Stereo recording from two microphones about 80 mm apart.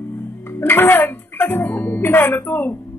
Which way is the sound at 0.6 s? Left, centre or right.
Left.